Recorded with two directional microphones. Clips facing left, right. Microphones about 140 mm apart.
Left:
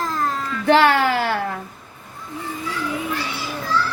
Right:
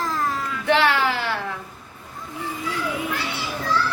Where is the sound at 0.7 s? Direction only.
40° left (ahead or behind).